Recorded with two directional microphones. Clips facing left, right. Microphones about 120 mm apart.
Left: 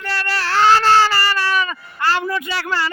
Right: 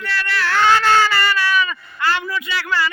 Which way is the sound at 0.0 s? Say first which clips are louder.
Even; 35° left (ahead or behind).